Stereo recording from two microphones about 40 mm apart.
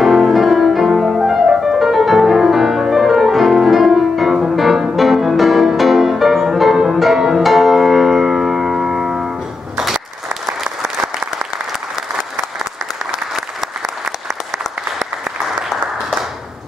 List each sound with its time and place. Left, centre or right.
0.0 s music: centre
11.0 s applause: right
13.0 s applause: centre